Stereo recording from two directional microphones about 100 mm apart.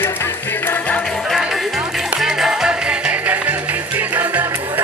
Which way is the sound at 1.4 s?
5° right (ahead or behind).